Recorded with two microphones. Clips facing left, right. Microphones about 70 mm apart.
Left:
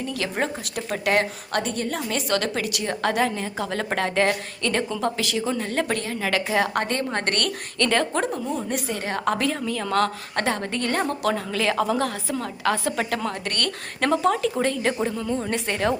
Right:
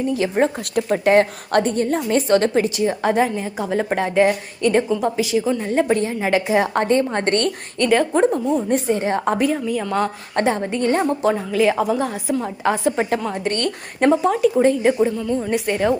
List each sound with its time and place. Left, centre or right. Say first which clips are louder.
0.1 s a woman's voice: right 8 dB; right
0.9 s a woman's voice: right 7 dB; right
3.1 s a woman's voice: right 5 dB; centre
7.9 s a woman's voice: right 6 dB; centre
8.2 s a woman's voice: right 8 dB; right
14.9 s a woman's voice: right 6 dB; centre